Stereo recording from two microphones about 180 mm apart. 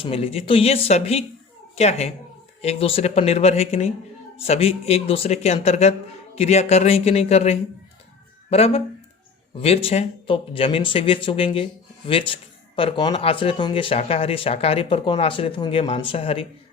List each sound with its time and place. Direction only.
0.0 s speech: 30° left (ahead or behind)